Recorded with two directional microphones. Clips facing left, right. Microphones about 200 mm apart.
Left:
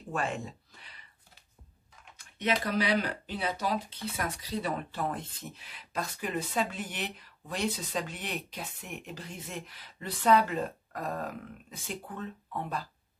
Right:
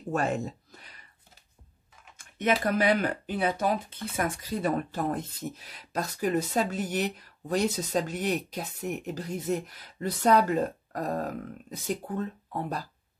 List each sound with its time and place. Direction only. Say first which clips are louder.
0.1 s a sound: right 5 dB; 40° right (ahead or behind)
2.1 s typing: right 5 dB; 50° right (ahead or behind)
2.6 s speech: right 4 dB; 50° right (ahead or behind)